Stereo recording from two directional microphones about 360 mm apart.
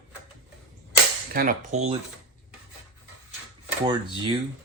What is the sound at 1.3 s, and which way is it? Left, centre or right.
Speech, right.